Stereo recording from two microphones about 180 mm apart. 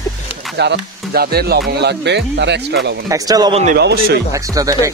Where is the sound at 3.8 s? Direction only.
65° right (ahead or behind).